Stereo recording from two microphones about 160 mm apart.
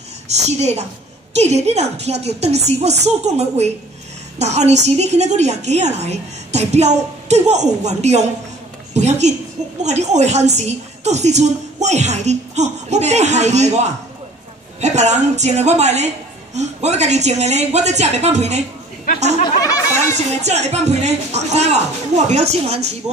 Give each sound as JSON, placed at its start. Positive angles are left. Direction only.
{"t": 0.3, "sound": "a woman's voice", "side_deg": -45}
{"t": 20.2, "sound": "a woman's voice", "side_deg": -45}